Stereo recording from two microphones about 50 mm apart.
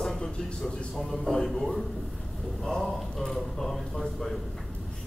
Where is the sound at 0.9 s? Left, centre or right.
Centre.